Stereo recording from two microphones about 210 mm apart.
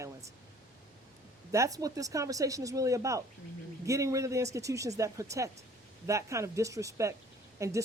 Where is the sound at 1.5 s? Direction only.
15° right (ahead or behind).